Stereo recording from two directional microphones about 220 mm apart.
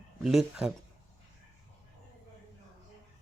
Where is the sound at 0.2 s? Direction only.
Centre (ahead or behind).